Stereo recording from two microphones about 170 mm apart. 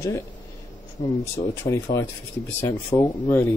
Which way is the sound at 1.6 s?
15° left (ahead or behind).